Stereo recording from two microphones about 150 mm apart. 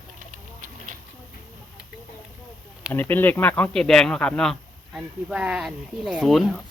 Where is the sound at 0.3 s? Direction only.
60° right (ahead or behind).